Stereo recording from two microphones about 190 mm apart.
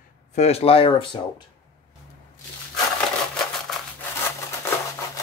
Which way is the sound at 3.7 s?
Centre (ahead or behind).